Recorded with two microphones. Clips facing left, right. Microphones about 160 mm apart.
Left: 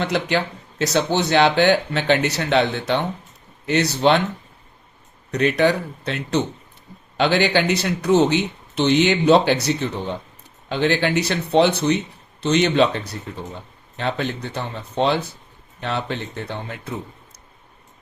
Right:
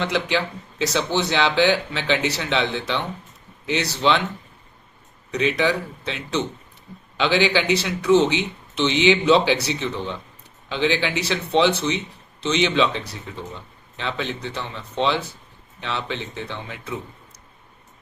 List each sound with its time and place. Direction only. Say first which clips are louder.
0.0 s speech: left 1 dB; 50° left (ahead or behind)
5.3 s speech: left 3 dB; 55° left (ahead or behind)